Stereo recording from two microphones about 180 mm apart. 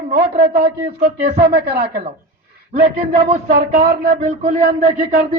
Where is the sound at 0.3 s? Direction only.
30° right (ahead or behind).